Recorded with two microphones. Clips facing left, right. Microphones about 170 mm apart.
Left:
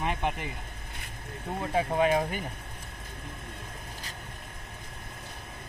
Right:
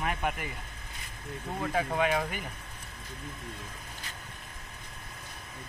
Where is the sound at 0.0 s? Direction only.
25° left (ahead or behind).